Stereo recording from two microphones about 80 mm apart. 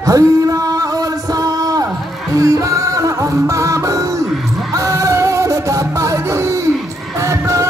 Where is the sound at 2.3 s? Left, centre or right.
Right.